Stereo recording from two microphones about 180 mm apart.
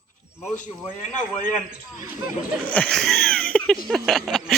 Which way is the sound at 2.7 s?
5° left (ahead or behind).